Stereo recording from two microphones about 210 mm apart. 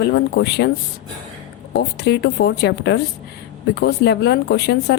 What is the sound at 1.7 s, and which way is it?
Speech, 50° left (ahead or behind).